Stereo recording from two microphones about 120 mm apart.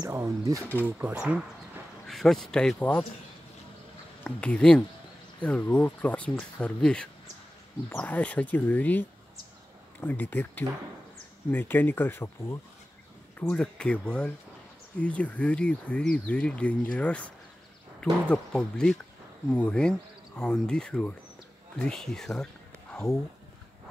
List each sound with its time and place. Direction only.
0.1 s speech: 25° right (ahead or behind)
0.7 s speech: 15° right (ahead or behind)
2.0 s speech: centre (ahead or behind)
4.2 s speech: 10° left (ahead or behind)
18.3 s speech: 10° left (ahead or behind)